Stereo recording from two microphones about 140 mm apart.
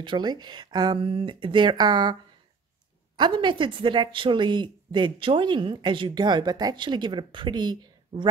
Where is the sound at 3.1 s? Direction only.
35° right (ahead or behind).